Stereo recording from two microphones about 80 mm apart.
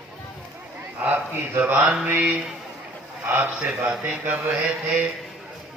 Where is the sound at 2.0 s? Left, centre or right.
Right.